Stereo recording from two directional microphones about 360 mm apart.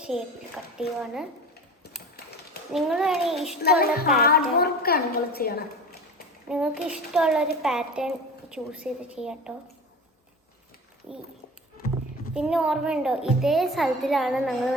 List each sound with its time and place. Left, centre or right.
0.0 s a child's voice: centre
2.1 s typewriter: left
2.7 s a woman's voice: centre
3.8 s child singing: left
4.2 s a woman's voice: left
6.5 s a woman's voice: centre
11.1 s a woman's voice: centre
12.3 s a woman's voice: centre